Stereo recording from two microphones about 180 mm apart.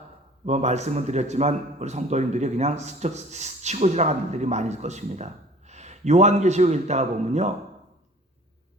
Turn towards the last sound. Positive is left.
turn(degrees=-40)  # may be behind; listen again after turning